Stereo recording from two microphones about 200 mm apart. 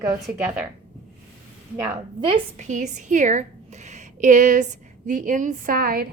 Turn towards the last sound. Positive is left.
turn(degrees=-45)  # may be behind; listen again after turning